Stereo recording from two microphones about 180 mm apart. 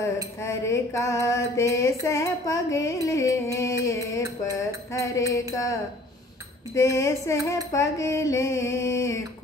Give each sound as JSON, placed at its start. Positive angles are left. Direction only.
{"t": 0.0, "sound": "music", "side_deg": 15}
{"t": 6.7, "sound": "music", "side_deg": 15}